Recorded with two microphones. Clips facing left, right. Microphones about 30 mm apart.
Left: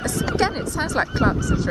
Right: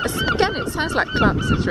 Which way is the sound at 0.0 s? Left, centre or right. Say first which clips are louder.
Right 3 dB; right.